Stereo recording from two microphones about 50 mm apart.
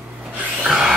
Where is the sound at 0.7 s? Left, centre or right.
Centre.